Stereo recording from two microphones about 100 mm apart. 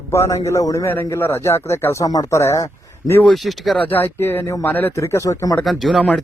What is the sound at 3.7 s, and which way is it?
A man's voice, 20° left (ahead or behind).